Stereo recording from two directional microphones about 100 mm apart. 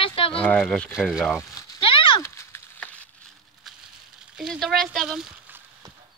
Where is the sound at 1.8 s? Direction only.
65° left (ahead or behind).